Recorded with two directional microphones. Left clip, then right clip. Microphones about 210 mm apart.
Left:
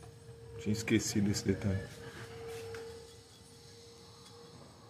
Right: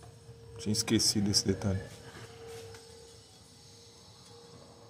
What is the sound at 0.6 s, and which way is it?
A man's voice, 20° right (ahead or behind).